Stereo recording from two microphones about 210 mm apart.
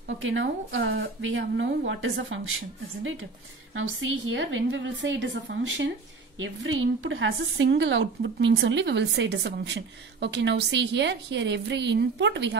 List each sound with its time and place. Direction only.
0.2 s speech: 60° right (ahead or behind)
3.7 s speech: 65° right (ahead or behind)